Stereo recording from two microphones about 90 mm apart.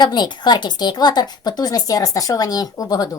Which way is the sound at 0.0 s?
55° left (ahead or behind).